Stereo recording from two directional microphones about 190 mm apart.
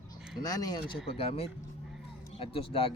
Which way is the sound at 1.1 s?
30° left (ahead or behind).